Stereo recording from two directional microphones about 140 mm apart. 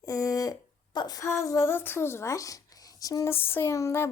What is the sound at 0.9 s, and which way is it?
Speech, 30° left (ahead or behind).